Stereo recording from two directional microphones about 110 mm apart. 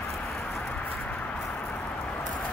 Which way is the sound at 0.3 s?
5° left (ahead or behind).